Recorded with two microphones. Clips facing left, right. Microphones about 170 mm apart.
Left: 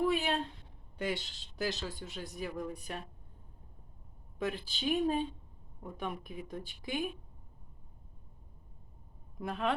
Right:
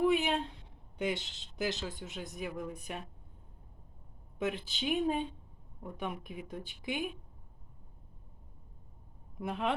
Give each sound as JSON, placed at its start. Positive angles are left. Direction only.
{"t": 0.0, "sound": "speech", "side_deg": -15}
{"t": 4.4, "sound": "speech", "side_deg": -20}
{"t": 9.4, "sound": "speech", "side_deg": -20}